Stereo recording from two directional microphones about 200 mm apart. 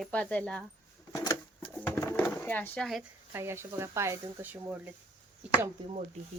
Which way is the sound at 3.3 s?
10° right (ahead or behind).